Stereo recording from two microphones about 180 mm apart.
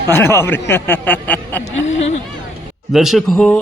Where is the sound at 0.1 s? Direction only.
10° left (ahead or behind).